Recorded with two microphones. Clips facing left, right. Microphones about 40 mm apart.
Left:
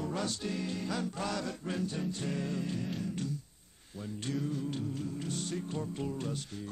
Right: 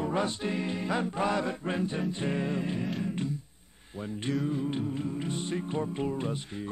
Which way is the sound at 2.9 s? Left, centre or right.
Right.